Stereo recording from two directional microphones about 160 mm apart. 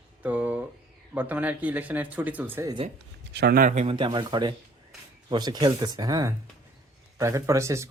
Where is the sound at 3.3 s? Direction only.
80° right.